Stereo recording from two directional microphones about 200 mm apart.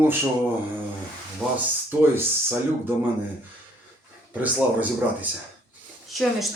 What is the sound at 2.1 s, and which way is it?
Speech, 10° right (ahead or behind).